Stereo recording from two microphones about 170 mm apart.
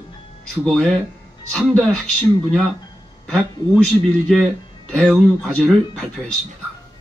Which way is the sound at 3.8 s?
5° left (ahead or behind).